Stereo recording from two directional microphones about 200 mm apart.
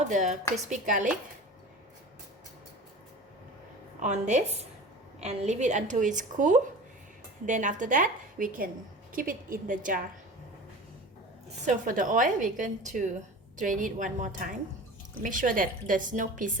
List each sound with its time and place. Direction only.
0.0 s a woman's voice: 35° right (ahead or behind)
4.0 s a woman's voice: 35° right (ahead or behind)
11.6 s a woman's voice: 40° right (ahead or behind)